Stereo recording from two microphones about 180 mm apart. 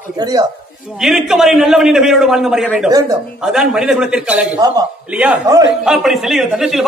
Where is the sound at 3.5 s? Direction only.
5° right (ahead or behind).